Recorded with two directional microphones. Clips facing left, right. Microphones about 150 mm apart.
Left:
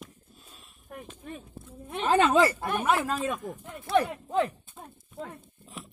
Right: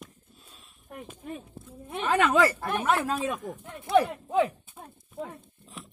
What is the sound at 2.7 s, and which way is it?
Speech, centre (ahead or behind).